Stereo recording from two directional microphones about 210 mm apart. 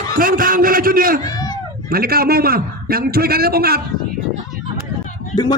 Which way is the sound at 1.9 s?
45° right (ahead or behind).